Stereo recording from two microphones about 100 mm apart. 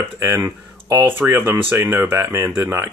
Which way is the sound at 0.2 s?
30° right (ahead or behind).